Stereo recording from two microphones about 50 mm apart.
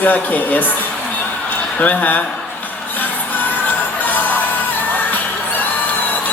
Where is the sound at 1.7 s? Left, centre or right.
Left.